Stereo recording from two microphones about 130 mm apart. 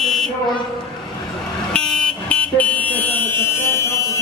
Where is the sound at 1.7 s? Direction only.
5° left (ahead or behind).